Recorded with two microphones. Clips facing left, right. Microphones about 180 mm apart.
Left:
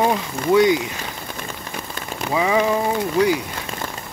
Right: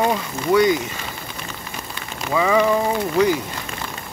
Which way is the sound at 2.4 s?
10° left (ahead or behind).